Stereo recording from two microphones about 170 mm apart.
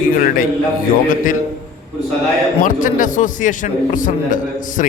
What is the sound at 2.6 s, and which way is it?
A man's voice, 50° left (ahead or behind).